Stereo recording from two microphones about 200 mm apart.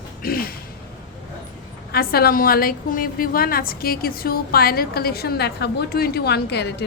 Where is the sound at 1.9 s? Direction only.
50° left (ahead or behind).